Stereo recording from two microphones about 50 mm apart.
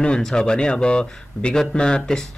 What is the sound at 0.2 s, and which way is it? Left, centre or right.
Speech, centre.